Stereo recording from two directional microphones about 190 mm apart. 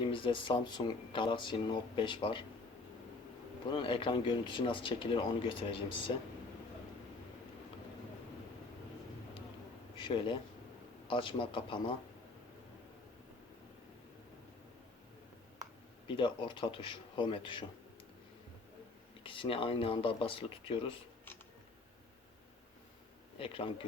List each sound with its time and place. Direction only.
0.0 s speech: 25° left (ahead or behind)
3.7 s speech: 25° left (ahead or behind)
10.0 s speech: 25° left (ahead or behind)
16.0 s speech: 25° left (ahead or behind)
19.2 s speech: 25° left (ahead or behind)
23.4 s speech: 30° left (ahead or behind)